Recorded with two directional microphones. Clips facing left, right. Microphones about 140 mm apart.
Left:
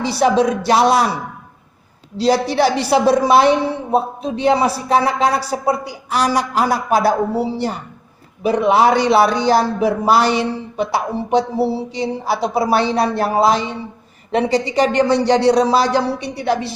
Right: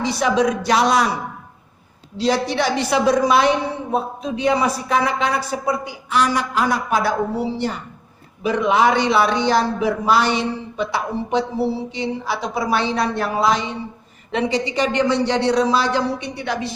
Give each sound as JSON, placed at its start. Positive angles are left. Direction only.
{"t": 0.0, "sound": "speech", "side_deg": 35}
{"t": 2.1, "sound": "speech", "side_deg": 35}